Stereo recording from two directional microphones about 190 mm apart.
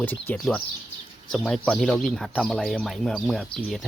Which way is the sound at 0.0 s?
10° left (ahead or behind).